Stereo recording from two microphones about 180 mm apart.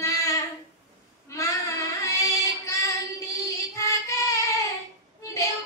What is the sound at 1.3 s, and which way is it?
Child singing, 15° left (ahead or behind).